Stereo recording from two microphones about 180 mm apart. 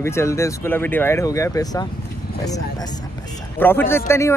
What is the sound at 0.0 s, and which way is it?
Speech, 15° left (ahead or behind).